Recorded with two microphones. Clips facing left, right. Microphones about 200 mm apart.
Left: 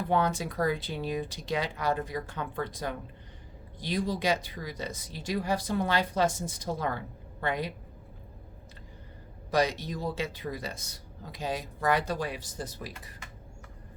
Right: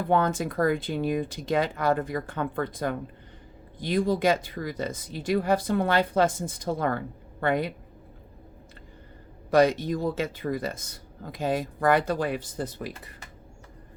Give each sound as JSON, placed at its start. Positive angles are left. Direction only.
{"t": 0.0, "sound": "speech", "side_deg": -50}
{"t": 9.5, "sound": "speech", "side_deg": -55}